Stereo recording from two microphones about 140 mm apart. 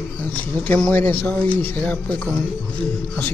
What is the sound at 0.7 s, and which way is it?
Speech, 10° left (ahead or behind).